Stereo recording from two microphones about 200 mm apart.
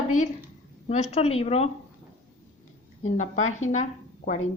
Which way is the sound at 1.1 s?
30° left (ahead or behind).